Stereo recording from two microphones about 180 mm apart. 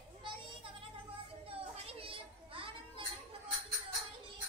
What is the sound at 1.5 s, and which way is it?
Children playing, 30° right (ahead or behind).